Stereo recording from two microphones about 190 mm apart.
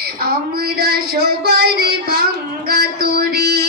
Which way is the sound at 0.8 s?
55° right (ahead or behind).